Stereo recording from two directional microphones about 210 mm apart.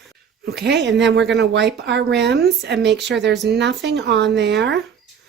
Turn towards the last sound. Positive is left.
turn(degrees=-55)  # may be behind; listen again after turning